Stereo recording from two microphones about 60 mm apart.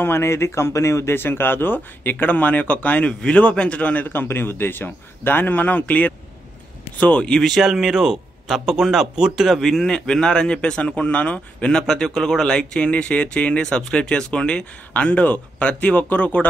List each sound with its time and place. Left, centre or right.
0.0 s speech: left
1.1 s speech: left; by 7.4 s centre
7.4 s speech: centre; by 16.4 s left